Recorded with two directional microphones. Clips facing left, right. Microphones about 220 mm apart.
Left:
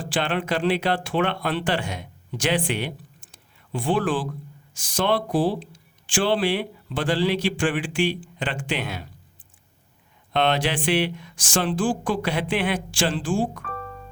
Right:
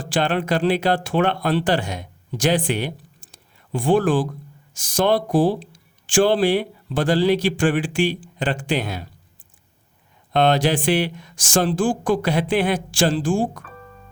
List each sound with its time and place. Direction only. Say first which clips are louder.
0.0 s speech: right 4 dB; 40° right (ahead or behind)
10.3 s speech: right 5 dB; 40° right (ahead or behind)